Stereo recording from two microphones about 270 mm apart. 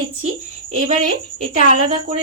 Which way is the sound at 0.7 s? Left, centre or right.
Right.